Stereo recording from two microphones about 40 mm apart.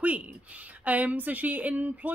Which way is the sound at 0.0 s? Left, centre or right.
Right.